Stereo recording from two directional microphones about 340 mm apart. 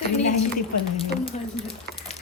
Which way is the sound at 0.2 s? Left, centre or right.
Left.